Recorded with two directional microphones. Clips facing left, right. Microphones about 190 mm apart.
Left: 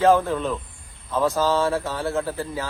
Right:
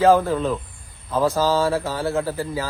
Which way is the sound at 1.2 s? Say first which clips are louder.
Right 2 dB; 35° right (ahead or behind).